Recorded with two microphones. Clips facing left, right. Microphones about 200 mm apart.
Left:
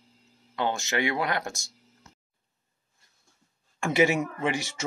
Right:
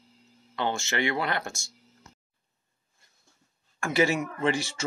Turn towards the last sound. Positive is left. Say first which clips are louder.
# right 2 dB
turn(degrees=20)  # may be behind; listen again after turning